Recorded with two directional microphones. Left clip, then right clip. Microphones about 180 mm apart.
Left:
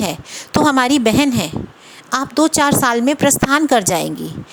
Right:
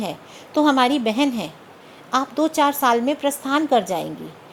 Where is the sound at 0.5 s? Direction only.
40° left (ahead or behind).